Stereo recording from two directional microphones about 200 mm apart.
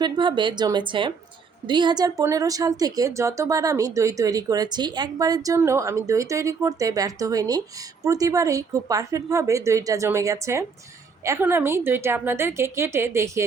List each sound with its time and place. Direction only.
0.0 s a woman's voice: 25° right (ahead or behind)